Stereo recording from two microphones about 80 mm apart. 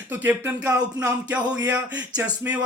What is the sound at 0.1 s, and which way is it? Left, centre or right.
Speech, right.